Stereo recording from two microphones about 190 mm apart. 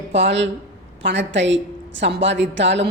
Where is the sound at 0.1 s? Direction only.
70° right (ahead or behind).